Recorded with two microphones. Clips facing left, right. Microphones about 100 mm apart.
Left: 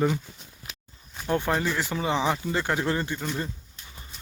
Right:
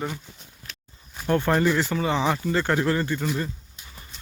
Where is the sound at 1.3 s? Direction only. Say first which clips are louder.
Right 4 dB; 10° left (ahead or behind).